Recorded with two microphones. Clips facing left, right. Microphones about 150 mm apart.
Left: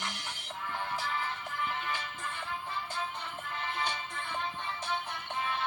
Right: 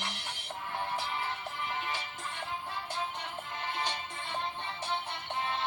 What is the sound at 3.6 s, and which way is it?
Music, 35° right (ahead or behind).